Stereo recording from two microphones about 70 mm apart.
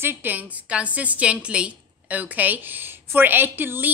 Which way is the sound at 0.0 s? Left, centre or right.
Right.